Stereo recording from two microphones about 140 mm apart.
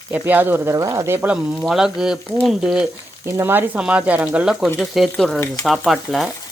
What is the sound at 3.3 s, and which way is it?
Speech, 15° right (ahead or behind).